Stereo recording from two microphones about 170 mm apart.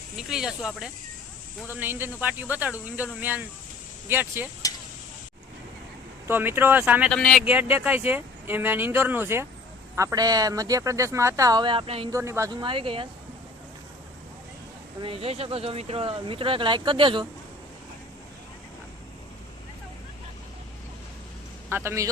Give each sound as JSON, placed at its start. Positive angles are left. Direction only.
{"t": 0.2, "sound": "speech", "side_deg": -5}
{"t": 4.7, "sound": "a sound", "side_deg": 20}
{"t": 6.2, "sound": "speech", "side_deg": -10}
{"t": 7.1, "sound": "speech", "side_deg": 5}
{"t": 7.4, "sound": "speech", "side_deg": -10}
{"t": 12.1, "sound": "speech", "side_deg": -15}
{"t": 15.0, "sound": "speech", "side_deg": -35}
{"t": 21.7, "sound": "speech", "side_deg": -15}